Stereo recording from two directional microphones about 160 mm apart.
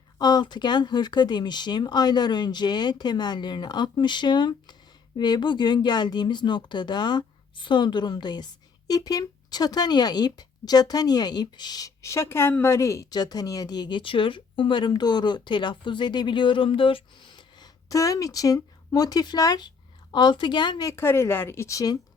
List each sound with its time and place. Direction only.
0.2 s speech: 25° left (ahead or behind)